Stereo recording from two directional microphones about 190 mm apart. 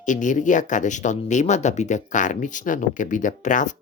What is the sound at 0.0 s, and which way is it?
Speech, 40° left (ahead or behind).